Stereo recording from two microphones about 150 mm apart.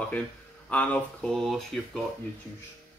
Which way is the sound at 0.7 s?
10° left (ahead or behind).